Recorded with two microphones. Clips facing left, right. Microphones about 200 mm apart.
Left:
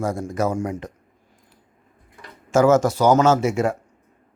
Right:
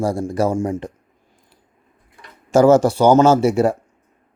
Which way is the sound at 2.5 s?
30° right (ahead or behind).